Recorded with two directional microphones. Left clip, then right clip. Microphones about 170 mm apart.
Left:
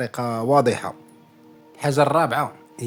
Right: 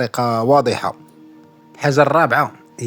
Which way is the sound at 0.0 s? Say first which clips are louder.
Right 7 dB; 45° right (ahead or behind).